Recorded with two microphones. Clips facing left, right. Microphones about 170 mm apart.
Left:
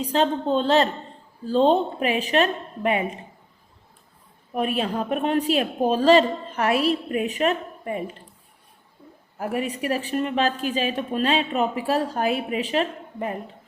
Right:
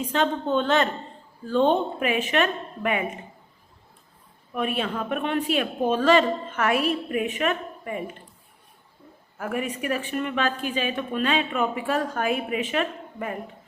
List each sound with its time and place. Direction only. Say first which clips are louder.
0.0 s a woman's voice: left 2 dB; 35° left (ahead or behind)
4.5 s a woman's voice: left 3 dB; 35° left (ahead or behind)
9.4 s a woman's voice: left 2 dB; 35° left (ahead or behind)